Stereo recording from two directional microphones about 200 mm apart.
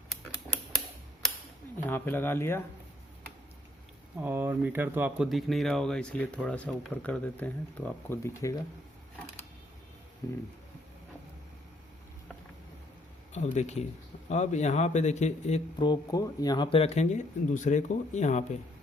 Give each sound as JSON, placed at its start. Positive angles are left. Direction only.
{"t": 1.9, "sound": "speech", "side_deg": 10}
{"t": 4.2, "sound": "speech", "side_deg": -10}
{"t": 13.3, "sound": "speech", "side_deg": 35}
{"t": 15.8, "sound": "speech", "side_deg": 20}